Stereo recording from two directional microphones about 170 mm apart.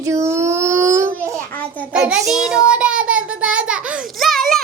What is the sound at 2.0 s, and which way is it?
Child singing, 5° right (ahead or behind).